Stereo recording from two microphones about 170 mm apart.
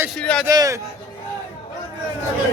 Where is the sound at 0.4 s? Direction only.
20° right (ahead or behind).